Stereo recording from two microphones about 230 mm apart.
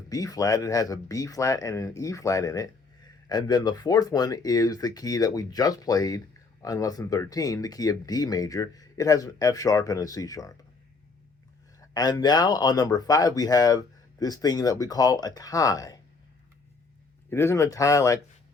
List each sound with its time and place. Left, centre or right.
0.1 s speech: centre
11.8 s speech: centre
17.2 s speech: centre